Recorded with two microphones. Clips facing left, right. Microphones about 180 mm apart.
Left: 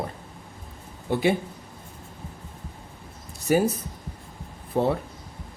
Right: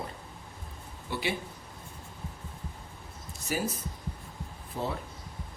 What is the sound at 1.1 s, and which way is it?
Speech, 50° left (ahead or behind).